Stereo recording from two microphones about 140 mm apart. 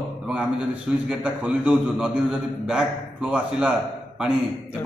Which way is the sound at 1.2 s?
10° right (ahead or behind).